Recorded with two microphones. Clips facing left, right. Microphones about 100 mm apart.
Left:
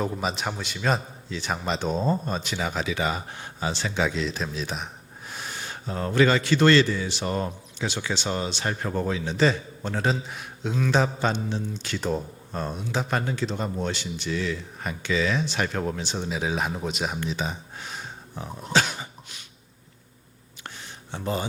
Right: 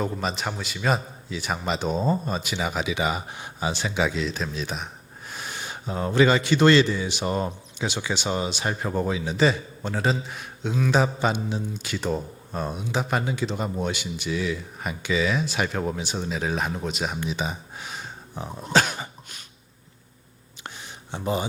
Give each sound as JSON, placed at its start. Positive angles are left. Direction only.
{"t": 0.0, "sound": "a man's voice", "side_deg": 0}
{"t": 17.2, "sound": "speech", "side_deg": -10}
{"t": 18.7, "sound": "cough", "side_deg": -45}
{"t": 20.7, "sound": "a sound", "side_deg": -15}